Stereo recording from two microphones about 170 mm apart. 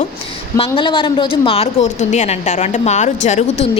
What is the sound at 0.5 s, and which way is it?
A woman's voice, 30° left (ahead or behind).